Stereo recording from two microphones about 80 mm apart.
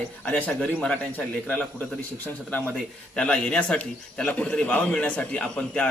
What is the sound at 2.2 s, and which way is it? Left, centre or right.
Speech, left.